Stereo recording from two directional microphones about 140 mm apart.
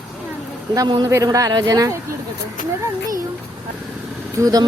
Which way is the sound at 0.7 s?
30° right (ahead or behind).